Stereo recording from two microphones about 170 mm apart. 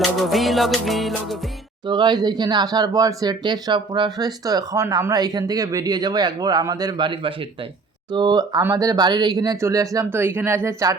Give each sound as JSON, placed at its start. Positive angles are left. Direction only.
{"t": 0.0, "sound": "music", "side_deg": 0}
{"t": 1.9, "sound": "speech", "side_deg": -25}